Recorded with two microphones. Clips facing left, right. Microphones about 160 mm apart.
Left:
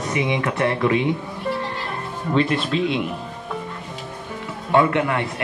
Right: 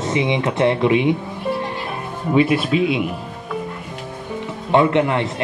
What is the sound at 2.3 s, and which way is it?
Speech, 10° right (ahead or behind).